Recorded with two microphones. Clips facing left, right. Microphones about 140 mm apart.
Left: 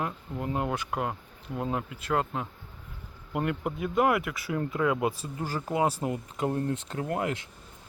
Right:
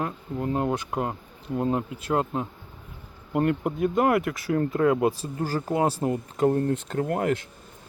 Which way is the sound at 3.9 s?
40° right (ahead or behind).